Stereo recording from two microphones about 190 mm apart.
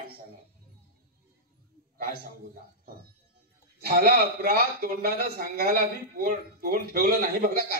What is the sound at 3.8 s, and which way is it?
A man's voice, 55° right (ahead or behind).